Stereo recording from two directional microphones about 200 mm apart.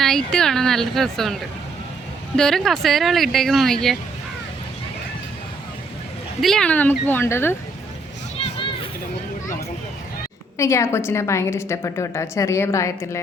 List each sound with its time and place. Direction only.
0.0 s speech: centre (ahead or behind)
6.4 s a woman's voice: 5° left (ahead or behind)
8.4 s a sound: 30° left (ahead or behind)
10.6 s a woman's voice: 15° left (ahead or behind)